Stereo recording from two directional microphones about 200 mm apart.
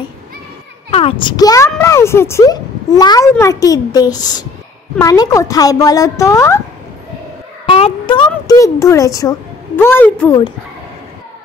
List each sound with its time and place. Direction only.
0.8 s a child's voice: 30° left (ahead or behind)
7.6 s a sound: 25° left (ahead or behind)
9.8 s a child's voice: 10° left (ahead or behind)